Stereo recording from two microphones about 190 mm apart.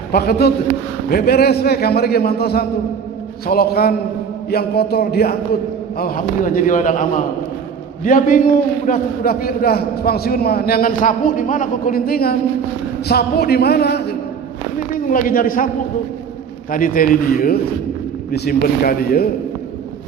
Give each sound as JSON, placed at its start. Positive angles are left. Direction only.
{"t": 0.1, "sound": "a man's voice", "side_deg": 55}
{"t": 14.9, "sound": "a man's voice", "side_deg": 45}
{"t": 16.7, "sound": "a man's voice", "side_deg": 45}